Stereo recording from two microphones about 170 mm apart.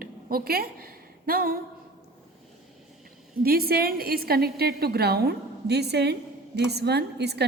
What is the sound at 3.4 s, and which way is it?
A woman's voice, 65° right (ahead or behind).